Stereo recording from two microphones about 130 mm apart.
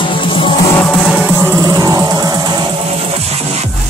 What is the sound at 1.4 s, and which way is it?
Music, 25° right (ahead or behind).